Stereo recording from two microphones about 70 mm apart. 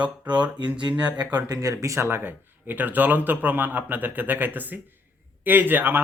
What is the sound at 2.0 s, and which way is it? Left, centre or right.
Speech, right.